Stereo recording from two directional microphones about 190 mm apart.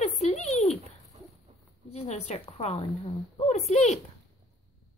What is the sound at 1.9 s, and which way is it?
A woman's voice, 35° left (ahead or behind).